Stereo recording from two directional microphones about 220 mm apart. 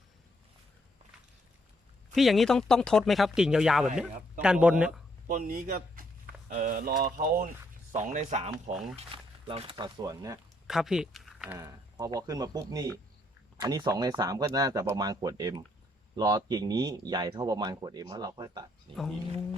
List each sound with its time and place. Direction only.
2.1 s speech: centre (ahead or behind)
5.3 s speech: 35° right (ahead or behind); by 10.4 s 15° right (ahead or behind)
10.7 s speech: centre (ahead or behind)
11.5 s speech: 15° right (ahead or behind)
18.9 s speech: 5° left (ahead or behind)